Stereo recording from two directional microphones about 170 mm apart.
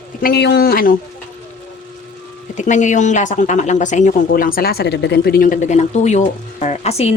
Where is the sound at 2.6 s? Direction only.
45° left (ahead or behind).